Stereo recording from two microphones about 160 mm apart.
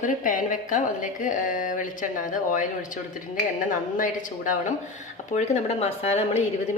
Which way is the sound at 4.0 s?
55° left (ahead or behind).